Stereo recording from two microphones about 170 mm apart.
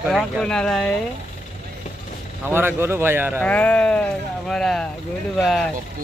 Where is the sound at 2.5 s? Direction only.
15° right (ahead or behind).